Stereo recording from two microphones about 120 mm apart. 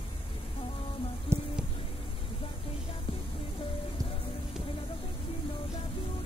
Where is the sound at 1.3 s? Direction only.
20° right (ahead or behind).